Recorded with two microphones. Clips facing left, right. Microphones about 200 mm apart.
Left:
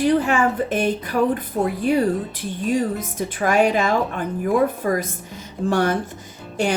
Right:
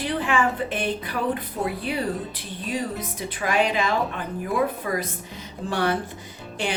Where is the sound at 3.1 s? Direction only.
45° left (ahead or behind).